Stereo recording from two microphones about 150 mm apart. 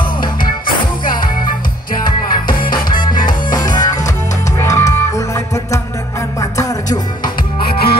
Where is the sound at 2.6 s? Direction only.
30° left (ahead or behind).